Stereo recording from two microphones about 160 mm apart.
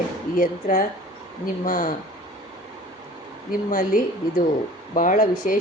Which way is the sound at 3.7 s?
60° left (ahead or behind).